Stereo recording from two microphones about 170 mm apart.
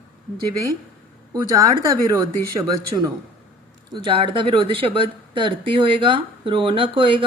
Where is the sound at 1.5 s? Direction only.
20° right (ahead or behind).